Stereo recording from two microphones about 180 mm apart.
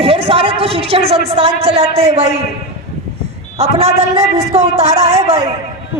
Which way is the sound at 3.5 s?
35° right (ahead or behind).